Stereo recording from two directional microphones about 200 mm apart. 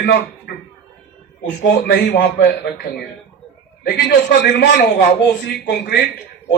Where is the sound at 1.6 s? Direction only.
60° left (ahead or behind).